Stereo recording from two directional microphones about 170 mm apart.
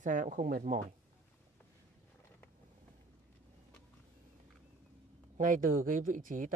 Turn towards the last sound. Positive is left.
turn(degrees=-50)  # may be behind; listen again after turning